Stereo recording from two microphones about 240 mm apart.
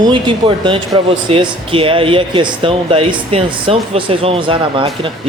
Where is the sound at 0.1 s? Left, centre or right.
Right.